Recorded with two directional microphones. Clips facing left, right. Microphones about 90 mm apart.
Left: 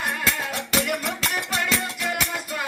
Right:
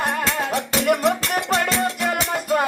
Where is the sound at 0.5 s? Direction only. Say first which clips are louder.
Right 6 dB; 45° right (ahead or behind).